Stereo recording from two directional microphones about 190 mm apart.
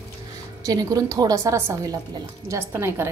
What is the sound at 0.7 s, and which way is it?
A woman's voice, 20° right (ahead or behind).